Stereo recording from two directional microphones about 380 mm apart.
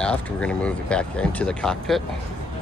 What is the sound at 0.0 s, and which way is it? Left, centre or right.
Speech, centre.